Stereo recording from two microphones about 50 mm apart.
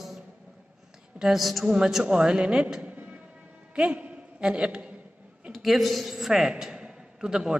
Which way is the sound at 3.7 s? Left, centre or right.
Right.